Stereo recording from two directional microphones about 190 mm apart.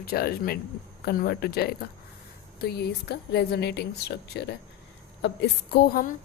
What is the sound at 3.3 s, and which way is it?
A woman's voice, 60° left (ahead or behind).